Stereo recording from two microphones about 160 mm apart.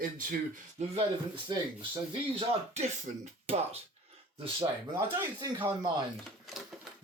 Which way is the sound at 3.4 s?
40° right (ahead or behind).